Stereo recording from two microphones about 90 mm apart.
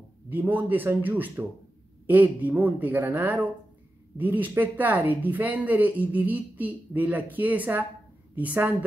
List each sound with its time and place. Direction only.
0.3 s speech: 20° right (ahead or behind)